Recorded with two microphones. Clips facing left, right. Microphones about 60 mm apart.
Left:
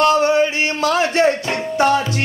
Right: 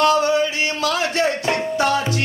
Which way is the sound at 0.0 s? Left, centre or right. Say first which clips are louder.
Left 2 dB; left.